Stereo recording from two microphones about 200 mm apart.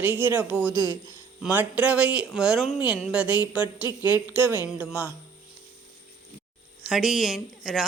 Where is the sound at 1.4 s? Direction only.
5° right (ahead or behind).